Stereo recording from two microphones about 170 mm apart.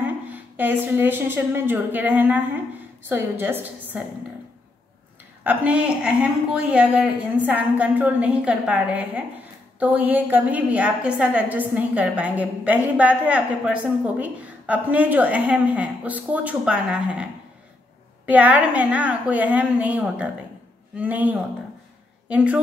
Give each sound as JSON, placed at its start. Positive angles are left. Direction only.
{"t": 0.3, "sound": "a woman's voice", "side_deg": -10}
{"t": 5.4, "sound": "a woman's voice", "side_deg": -10}